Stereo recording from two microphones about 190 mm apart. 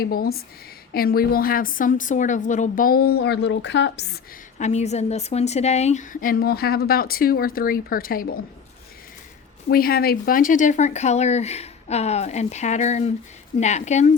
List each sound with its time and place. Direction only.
0.0 s a woman's voice: 50° left (ahead or behind)
4.5 s a woman's voice: 35° left (ahead or behind)
9.6 s speech: 50° left (ahead or behind)